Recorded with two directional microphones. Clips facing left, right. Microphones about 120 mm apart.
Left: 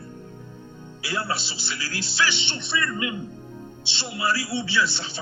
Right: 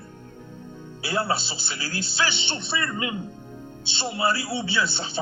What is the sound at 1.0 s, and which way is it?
A man's voice, 25° right (ahead or behind).